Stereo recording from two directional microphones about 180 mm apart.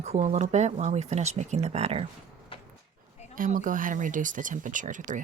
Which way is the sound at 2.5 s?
30° left (ahead or behind).